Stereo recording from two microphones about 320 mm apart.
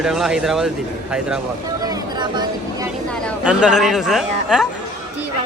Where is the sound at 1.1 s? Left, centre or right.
Centre.